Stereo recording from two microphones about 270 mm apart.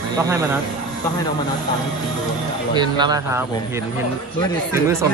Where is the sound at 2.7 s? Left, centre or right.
Centre.